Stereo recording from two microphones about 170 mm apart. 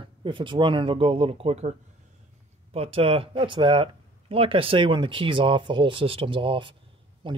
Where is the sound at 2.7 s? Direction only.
35° right (ahead or behind).